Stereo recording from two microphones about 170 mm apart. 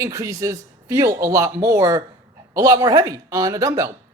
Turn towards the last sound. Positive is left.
turn(degrees=-20)  # may be behind; listen again after turning